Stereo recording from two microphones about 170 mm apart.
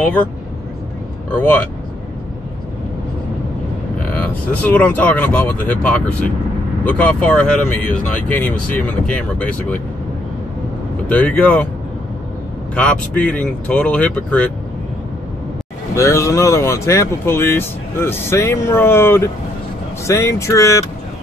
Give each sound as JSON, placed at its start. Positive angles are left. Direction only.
{"t": 4.1, "sound": "speech", "side_deg": 10}
{"t": 11.1, "sound": "speech", "side_deg": 10}
{"t": 12.7, "sound": "speech", "side_deg": 5}
{"t": 15.9, "sound": "speech", "side_deg": 15}